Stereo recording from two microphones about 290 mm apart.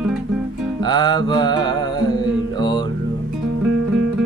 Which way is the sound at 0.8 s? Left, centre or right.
Centre.